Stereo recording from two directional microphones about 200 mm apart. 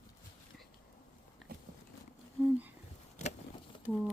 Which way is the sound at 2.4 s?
10° right (ahead or behind).